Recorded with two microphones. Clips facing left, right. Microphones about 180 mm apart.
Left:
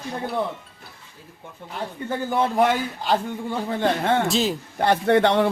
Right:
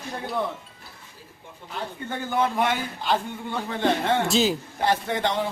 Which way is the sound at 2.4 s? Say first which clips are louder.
Left 3 dB; 40° left (ahead or behind).